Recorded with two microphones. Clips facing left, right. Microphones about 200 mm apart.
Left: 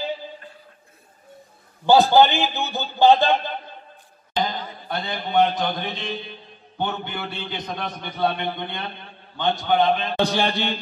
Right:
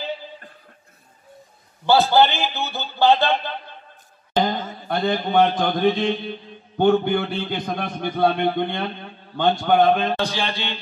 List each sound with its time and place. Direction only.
1.9 s a man's voice: 15° left (ahead or behind)
4.4 s a man's voice: 50° right (ahead or behind)
10.2 s a man's voice: 60° left (ahead or behind)